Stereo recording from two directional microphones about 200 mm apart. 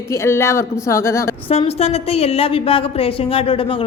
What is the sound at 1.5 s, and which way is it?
A woman's voice, 30° left (ahead or behind).